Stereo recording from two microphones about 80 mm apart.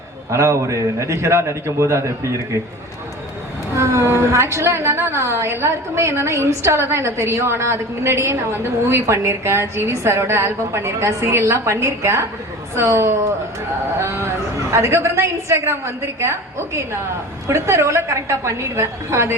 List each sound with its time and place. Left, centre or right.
0.3 s a woman's voice: right
3.8 s a woman's voice: right